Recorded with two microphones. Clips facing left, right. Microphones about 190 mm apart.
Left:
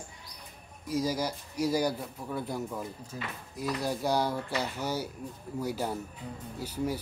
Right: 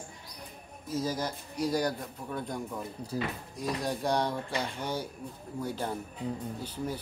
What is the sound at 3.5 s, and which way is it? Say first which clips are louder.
Speech: left 2 dB; centre (ahead or behind).